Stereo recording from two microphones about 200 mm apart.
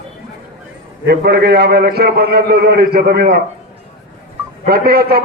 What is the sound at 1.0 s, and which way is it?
A man's voice, 55° right (ahead or behind).